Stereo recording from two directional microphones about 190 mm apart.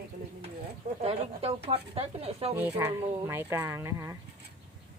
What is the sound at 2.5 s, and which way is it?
Speech, 15° right (ahead or behind).